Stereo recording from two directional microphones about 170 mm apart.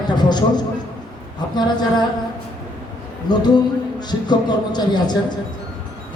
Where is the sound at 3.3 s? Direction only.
25° left (ahead or behind).